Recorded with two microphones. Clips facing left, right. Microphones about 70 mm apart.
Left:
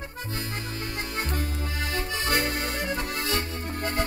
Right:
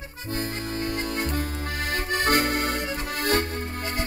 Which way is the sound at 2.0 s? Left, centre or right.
Right.